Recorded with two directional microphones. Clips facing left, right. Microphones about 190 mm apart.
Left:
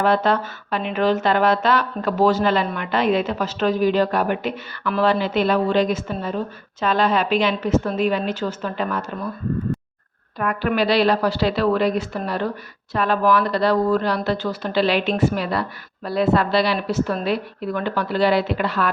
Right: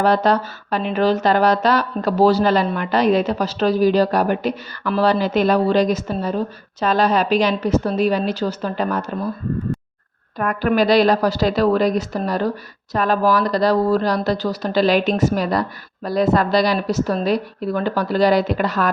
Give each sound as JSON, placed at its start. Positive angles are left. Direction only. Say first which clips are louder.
{"t": 0.0, "sound": "speech", "louder": "right 2 dB", "side_deg": -40}
{"t": 10.3, "sound": "speech", "louder": "right 3 dB", "side_deg": -45}